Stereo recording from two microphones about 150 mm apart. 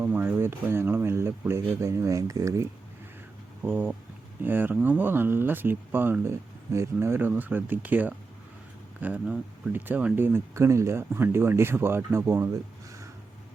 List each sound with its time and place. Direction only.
0.0 s speech: 15° right (ahead or behind)